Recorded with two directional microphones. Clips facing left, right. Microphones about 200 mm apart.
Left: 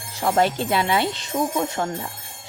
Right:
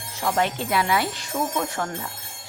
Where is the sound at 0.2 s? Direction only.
35° left (ahead or behind).